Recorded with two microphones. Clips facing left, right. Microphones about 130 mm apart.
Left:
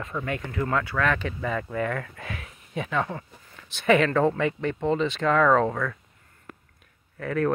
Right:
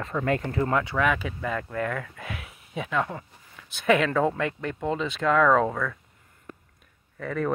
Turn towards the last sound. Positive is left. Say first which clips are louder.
# left 3 dB
turn(degrees=0)  # may be behind; listen again after turning